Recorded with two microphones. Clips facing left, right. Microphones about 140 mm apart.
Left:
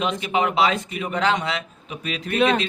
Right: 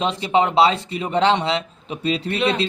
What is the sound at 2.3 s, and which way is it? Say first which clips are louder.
Speech: left 4 dB; 45° left (ahead or behind).